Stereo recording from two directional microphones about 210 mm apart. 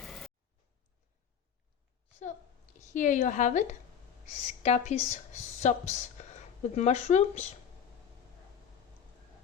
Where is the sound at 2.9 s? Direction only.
40° left (ahead or behind).